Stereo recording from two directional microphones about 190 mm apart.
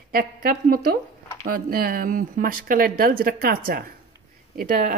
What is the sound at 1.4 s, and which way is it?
Speech, 50° right (ahead or behind).